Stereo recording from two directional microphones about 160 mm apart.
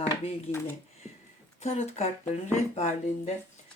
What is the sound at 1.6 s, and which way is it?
Speech, 45° left (ahead or behind).